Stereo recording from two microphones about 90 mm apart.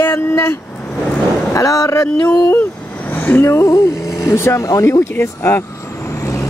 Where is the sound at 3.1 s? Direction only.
25° left (ahead or behind).